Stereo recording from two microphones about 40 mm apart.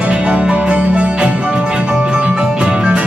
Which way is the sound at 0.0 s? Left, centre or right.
Right.